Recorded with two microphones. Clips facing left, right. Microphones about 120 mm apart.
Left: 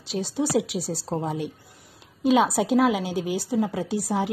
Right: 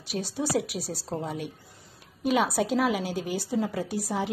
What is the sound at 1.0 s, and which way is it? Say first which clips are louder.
Speech: left 4 dB; 30° left (ahead or behind).